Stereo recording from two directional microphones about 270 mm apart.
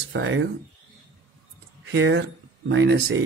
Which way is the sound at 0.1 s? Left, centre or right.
Right.